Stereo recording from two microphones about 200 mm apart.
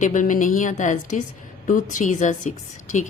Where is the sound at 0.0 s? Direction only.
40° left (ahead or behind).